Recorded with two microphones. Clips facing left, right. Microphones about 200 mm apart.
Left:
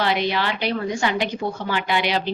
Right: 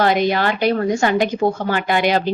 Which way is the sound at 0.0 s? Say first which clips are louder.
Right 6 dB; 45° right (ahead or behind).